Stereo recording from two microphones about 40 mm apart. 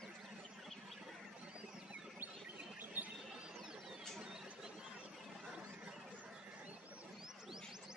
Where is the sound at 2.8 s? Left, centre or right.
Right.